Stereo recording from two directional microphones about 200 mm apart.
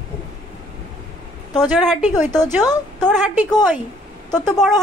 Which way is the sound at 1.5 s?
Centre (ahead or behind).